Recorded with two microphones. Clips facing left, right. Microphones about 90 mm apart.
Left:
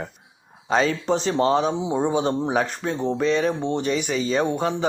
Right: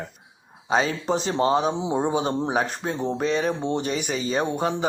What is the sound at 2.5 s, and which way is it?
Speech, 35° right (ahead or behind).